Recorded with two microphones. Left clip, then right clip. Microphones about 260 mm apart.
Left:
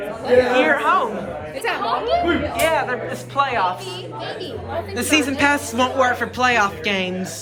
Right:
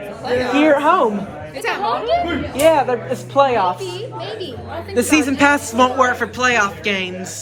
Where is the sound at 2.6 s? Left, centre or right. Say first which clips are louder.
Right 10 dB; centre.